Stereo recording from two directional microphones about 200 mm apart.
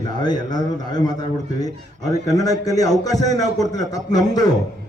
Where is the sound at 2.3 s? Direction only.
15° left (ahead or behind).